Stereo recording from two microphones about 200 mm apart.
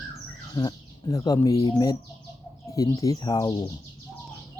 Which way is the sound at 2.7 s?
15° left (ahead or behind).